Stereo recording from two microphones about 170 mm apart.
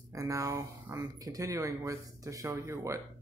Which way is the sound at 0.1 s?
20° right (ahead or behind).